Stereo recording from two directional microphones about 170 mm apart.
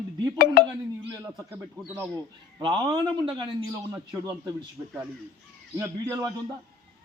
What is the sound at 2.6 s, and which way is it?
Speech, 30° right (ahead or behind).